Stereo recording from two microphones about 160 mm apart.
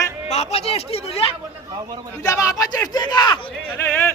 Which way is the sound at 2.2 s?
20° left (ahead or behind).